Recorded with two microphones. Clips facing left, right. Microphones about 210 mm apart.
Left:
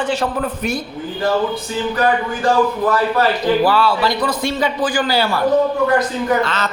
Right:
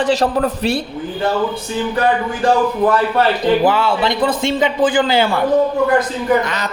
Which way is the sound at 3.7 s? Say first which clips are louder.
Even; 20° right (ahead or behind).